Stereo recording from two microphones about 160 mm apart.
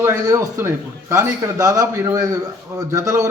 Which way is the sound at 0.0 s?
20° right (ahead or behind).